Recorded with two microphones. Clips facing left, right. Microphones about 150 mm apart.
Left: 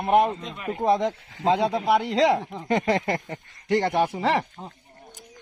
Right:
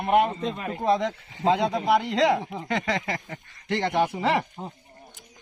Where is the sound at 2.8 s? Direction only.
50° left (ahead or behind).